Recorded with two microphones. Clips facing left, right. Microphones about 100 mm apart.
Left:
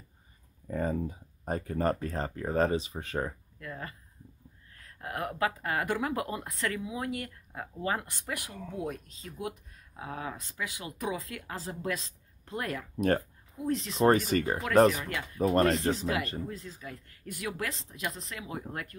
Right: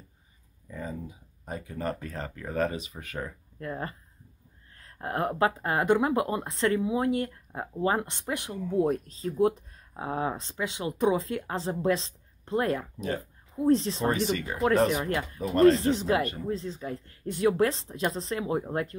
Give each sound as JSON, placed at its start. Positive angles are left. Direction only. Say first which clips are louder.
{"t": 0.7, "sound": "speech", "louder": "left 6 dB", "side_deg": 50}
{"t": 3.5, "sound": "speech", "louder": "right 6 dB", "side_deg": -35}
{"t": 13.9, "sound": "speech", "louder": "left 3 dB", "side_deg": 45}
{"t": 14.9, "sound": "speech", "louder": "right 3 dB", "side_deg": -35}
{"t": 15.3, "sound": "speech", "louder": "right 5 dB", "side_deg": 35}
{"t": 16.0, "sound": "speech", "louder": "right 5 dB", "side_deg": -35}